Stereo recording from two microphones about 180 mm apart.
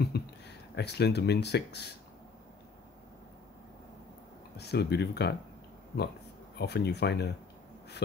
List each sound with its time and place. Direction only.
0.0 s speech: 65° left (ahead or behind)
4.6 s speech: 65° left (ahead or behind)
6.6 s speech: 70° left (ahead or behind)